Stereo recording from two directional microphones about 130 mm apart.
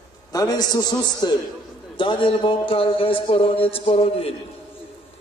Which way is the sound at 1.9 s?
40° left (ahead or behind).